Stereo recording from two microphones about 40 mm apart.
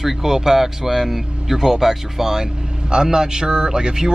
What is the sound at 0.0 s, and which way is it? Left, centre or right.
Speech, centre.